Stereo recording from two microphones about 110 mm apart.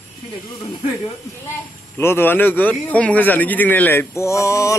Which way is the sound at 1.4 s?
20° left (ahead or behind).